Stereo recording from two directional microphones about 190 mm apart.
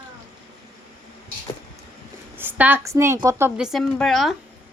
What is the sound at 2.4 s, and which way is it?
A woman's voice, 10° right (ahead or behind).